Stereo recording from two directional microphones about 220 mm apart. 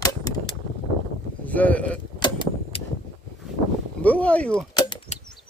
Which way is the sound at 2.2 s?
20° left (ahead or behind).